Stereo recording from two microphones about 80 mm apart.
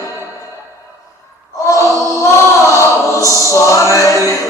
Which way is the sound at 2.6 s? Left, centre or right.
Left.